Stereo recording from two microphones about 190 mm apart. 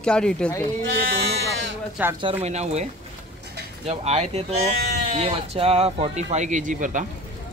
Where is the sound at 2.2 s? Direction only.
30° right (ahead or behind).